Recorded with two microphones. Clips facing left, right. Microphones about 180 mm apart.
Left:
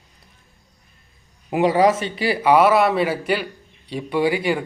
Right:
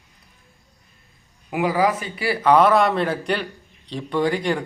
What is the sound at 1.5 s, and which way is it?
Speech, 25° left (ahead or behind).